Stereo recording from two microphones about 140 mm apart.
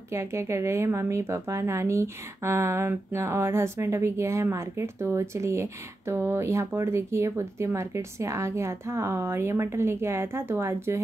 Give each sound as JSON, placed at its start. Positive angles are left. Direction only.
{"t": 0.1, "sound": "a woman's voice", "side_deg": -20}